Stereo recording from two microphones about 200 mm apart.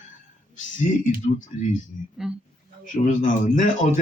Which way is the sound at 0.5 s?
40° left (ahead or behind).